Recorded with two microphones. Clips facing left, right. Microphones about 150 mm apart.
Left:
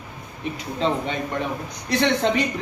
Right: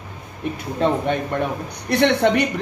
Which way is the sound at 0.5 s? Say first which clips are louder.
Right 3 dB; 55° right (ahead or behind).